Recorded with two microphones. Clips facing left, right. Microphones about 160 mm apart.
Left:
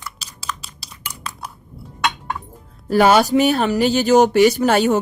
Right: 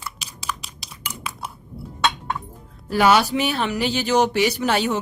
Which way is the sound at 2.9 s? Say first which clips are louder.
Left 4 dB; 45° left (ahead or behind).